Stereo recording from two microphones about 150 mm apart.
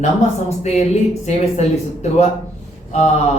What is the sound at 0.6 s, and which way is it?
Speech, 50° left (ahead or behind).